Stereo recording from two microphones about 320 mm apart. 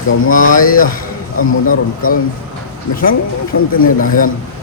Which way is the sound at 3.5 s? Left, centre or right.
Left.